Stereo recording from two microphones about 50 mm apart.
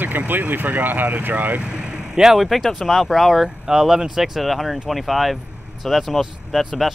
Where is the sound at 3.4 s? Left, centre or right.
Centre.